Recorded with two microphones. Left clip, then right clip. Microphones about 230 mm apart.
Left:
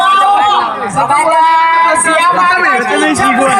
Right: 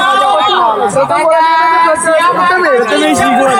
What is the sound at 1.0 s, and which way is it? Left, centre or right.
Speech, left.